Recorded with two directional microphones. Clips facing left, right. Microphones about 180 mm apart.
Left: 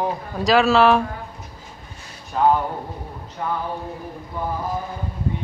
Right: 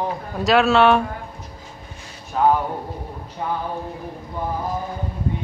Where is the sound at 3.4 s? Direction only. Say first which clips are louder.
Even; 20° right (ahead or behind).